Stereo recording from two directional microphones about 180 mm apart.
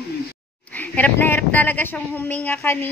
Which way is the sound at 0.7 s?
10° left (ahead or behind).